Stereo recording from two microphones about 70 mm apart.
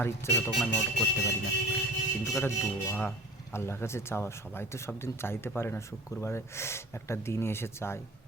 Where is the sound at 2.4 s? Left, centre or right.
Left.